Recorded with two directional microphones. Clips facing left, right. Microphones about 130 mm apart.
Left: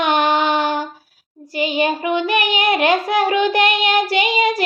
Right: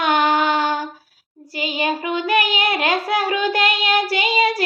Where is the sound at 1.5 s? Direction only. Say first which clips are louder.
Left 4 dB; 20° left (ahead or behind).